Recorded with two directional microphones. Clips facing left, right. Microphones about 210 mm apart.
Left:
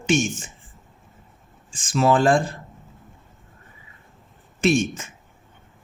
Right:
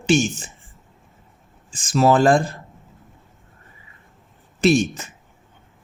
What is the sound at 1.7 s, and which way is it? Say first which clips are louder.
Speech: right 3 dB; 40° right (ahead or behind).